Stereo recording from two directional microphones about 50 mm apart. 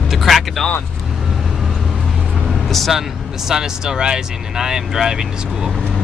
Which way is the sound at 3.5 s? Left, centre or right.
Centre.